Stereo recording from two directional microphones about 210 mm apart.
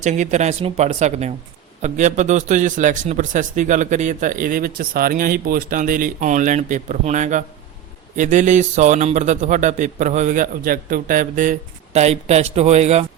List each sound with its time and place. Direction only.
0.0 s a man's voice: 35° right (ahead or behind)